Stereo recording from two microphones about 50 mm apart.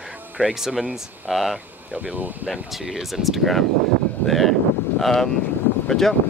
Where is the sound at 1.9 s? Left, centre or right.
Right.